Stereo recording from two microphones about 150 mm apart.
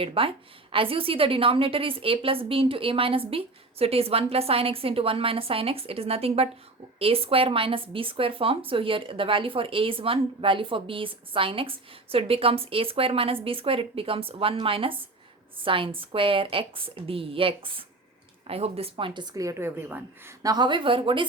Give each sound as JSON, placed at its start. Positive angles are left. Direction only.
{"t": 0.0, "sound": "speech", "side_deg": -40}